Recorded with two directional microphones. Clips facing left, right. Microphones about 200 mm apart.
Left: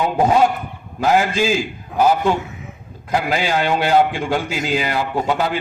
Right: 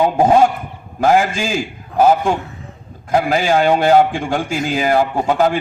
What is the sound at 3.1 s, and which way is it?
A man's voice, 45° right (ahead or behind).